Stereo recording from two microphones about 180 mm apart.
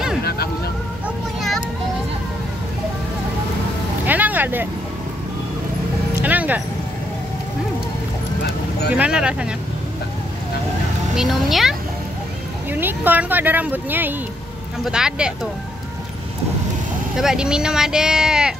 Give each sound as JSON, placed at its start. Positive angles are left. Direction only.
{"t": 0.2, "sound": "music", "side_deg": 60}
{"t": 1.0, "sound": "a sound", "side_deg": 0}
{"t": 4.0, "sound": "vehicle", "side_deg": -10}
{"t": 6.2, "sound": "a sound", "side_deg": -10}
{"t": 8.9, "sound": "speech", "side_deg": -5}
{"t": 11.1, "sound": "a woman's voice", "side_deg": 0}
{"t": 17.2, "sound": "speech", "side_deg": -5}